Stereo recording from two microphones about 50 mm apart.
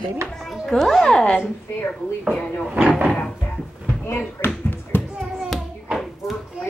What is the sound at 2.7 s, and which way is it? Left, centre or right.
Speech, right.